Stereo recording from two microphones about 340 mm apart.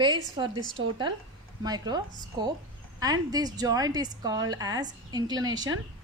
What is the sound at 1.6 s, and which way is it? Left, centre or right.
Speech, centre.